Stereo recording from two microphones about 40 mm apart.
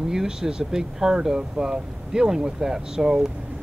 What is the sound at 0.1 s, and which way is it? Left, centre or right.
Speech, centre.